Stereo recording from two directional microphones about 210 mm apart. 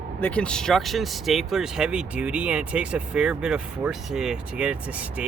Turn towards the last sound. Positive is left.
turn(degrees=-5)  # may be behind; listen again after turning